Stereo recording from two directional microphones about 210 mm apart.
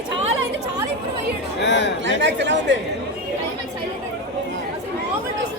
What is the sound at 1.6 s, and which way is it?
Chatter, 60° left (ahead or behind).